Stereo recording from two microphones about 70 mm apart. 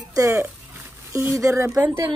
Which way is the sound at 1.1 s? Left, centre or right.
Right.